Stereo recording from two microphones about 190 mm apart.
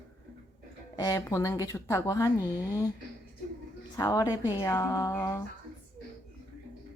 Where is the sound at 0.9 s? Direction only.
15° left (ahead or behind).